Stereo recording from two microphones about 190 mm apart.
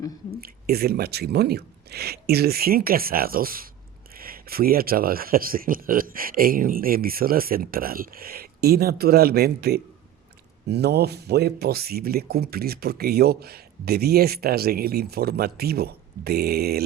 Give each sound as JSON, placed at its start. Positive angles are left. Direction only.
{"t": 0.4, "sound": "speech", "side_deg": -55}